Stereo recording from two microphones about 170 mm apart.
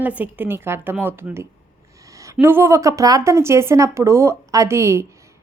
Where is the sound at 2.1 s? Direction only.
20° right (ahead or behind).